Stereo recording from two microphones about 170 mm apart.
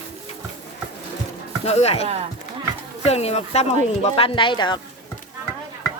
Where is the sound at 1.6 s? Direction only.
40° left (ahead or behind).